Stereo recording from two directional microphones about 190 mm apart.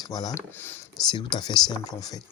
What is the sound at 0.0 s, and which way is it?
Speech, 20° left (ahead or behind).